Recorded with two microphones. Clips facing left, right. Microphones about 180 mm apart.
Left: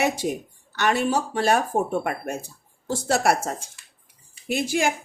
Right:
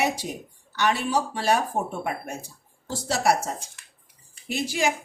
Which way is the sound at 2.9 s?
55° left (ahead or behind).